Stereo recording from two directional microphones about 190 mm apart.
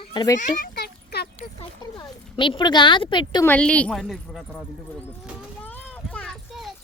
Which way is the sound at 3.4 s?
5° left (ahead or behind).